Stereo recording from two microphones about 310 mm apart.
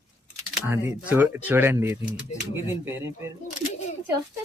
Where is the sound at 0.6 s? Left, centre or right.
Centre.